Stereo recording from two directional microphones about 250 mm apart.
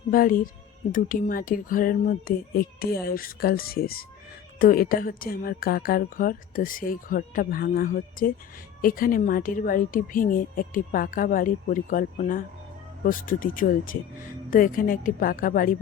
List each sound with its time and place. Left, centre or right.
0.1 s speech: left